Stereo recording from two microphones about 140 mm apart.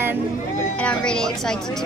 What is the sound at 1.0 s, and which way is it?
Speech, 5° left (ahead or behind).